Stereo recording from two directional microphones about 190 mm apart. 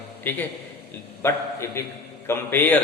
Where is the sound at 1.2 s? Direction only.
15° left (ahead or behind).